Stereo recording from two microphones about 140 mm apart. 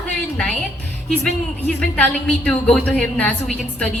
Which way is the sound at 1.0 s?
5° left (ahead or behind).